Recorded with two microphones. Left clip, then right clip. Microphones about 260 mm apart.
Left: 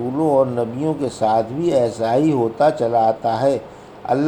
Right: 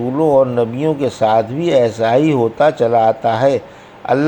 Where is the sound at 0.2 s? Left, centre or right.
Right.